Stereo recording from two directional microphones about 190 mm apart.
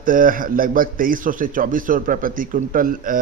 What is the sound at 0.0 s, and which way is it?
A man's voice, 45° right (ahead or behind).